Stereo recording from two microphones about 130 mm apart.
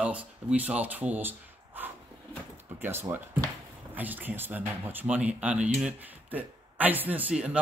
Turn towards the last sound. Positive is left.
turn(degrees=-10)  # may be behind; listen again after turning